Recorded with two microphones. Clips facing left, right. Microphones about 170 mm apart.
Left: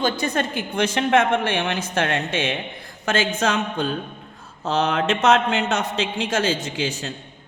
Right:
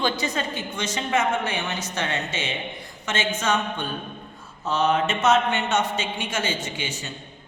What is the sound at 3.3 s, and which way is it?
A man's voice, 75° left (ahead or behind).